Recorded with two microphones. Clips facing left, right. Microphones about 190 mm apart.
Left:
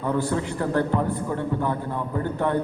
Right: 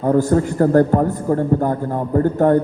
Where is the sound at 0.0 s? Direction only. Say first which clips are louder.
Right 9 dB; 45° right (ahead or behind).